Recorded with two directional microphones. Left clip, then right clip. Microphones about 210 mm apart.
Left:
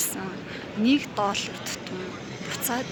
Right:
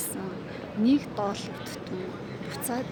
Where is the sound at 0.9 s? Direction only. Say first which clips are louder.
Left 3 dB; 5° right (ahead or behind).